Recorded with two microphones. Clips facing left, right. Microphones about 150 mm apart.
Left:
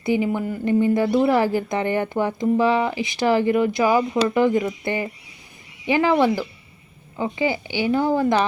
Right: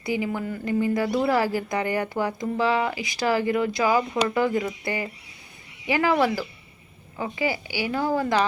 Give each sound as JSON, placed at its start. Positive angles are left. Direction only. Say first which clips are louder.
{"t": 0.0, "sound": "speech", "louder": "left 5 dB", "side_deg": 25}